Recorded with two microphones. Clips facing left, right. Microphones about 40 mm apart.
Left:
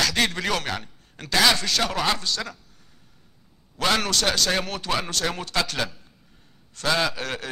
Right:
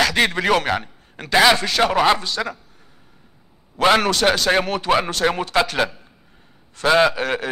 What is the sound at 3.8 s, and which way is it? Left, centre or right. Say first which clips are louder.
A man's voice: right 7 dB; right.